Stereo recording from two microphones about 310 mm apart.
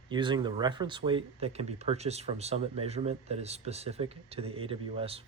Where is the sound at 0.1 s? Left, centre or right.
Centre.